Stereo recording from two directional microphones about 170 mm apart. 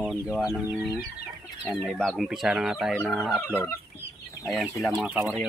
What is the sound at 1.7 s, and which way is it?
Speech, 5° left (ahead or behind).